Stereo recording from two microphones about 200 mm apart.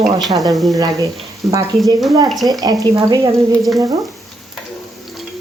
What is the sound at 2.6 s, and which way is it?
Speech, 20° right (ahead or behind).